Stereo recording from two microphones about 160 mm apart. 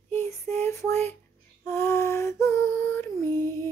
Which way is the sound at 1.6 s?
15° left (ahead or behind).